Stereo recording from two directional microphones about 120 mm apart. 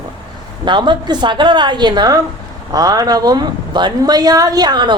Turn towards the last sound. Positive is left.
turn(degrees=-35)  # may be behind; listen again after turning